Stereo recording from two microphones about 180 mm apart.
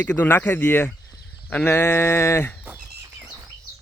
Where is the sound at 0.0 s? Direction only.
10° left (ahead or behind).